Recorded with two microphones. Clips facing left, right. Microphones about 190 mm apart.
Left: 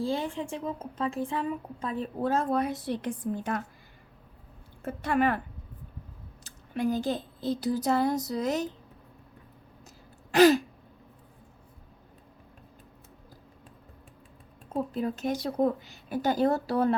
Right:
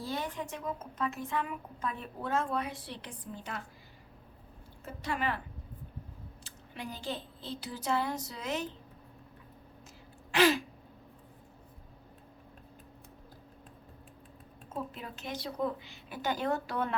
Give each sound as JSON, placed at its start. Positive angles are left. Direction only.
{"t": 0.0, "sound": "a woman's voice", "side_deg": 30}
{"t": 4.8, "sound": "speech", "side_deg": 55}
{"t": 6.4, "sound": "a woman's voice", "side_deg": 45}
{"t": 10.3, "sound": "a woman's voice", "side_deg": 40}
{"t": 14.7, "sound": "a woman's voice", "side_deg": 40}